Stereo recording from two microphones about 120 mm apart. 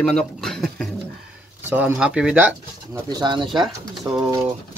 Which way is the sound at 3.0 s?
35° right (ahead or behind).